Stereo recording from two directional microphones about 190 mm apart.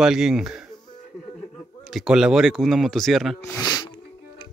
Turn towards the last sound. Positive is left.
turn(degrees=20)  # may be behind; listen again after turning